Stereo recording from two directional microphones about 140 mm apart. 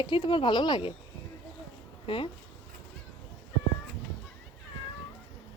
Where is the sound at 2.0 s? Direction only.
40° left (ahead or behind).